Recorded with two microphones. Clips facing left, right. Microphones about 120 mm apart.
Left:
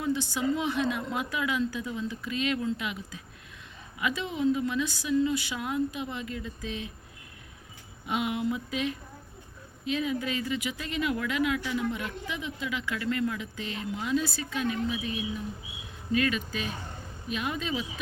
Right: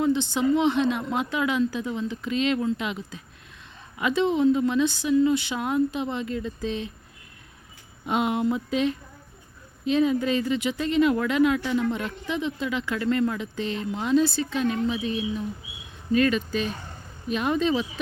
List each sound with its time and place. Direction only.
0.0 s speech: 25° right (ahead or behind)
8.0 s speech: 30° right (ahead or behind)
16.2 s speech: 30° right (ahead or behind)